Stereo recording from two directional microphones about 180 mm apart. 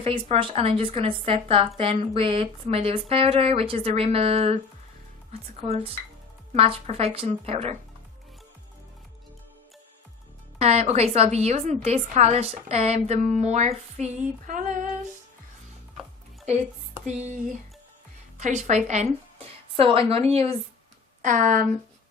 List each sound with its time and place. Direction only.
0.0 s speech: 30° right (ahead or behind)
10.6 s speech: 35° right (ahead or behind)
17.1 s a woman's voice: 40° right (ahead or behind)
21.2 s speech: 45° right (ahead or behind)